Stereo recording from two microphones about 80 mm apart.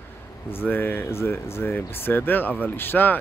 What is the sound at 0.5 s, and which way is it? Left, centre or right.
Speech, left.